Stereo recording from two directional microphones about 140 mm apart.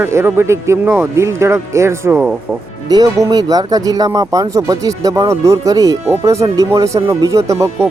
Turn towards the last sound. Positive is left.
turn(degrees=-20)  # may be behind; listen again after turning